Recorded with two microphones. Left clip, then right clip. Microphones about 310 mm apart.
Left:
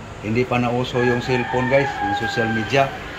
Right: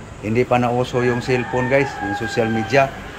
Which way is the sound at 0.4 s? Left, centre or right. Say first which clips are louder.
Right 3 dB; centre.